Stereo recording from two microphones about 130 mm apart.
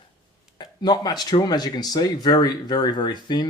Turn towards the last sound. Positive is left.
turn(degrees=35)  # may be behind; listen again after turning